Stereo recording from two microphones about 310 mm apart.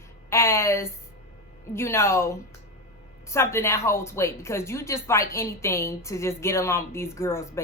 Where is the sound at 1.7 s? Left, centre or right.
Centre.